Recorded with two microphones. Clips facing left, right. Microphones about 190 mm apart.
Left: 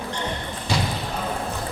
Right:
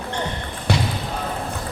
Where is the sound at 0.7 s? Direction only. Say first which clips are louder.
Right 3 dB; 60° right (ahead or behind).